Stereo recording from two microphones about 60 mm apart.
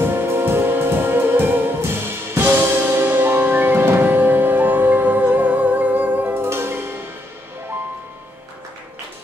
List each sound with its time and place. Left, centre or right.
0.0 s music: right